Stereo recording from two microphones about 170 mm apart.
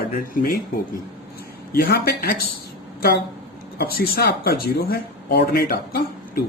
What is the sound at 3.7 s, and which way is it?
Speech, 60° left (ahead or behind).